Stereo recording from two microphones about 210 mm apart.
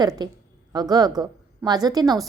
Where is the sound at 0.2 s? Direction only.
20° right (ahead or behind).